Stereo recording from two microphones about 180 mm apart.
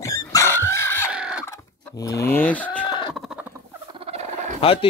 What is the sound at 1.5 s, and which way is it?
Chicken, 20° left (ahead or behind).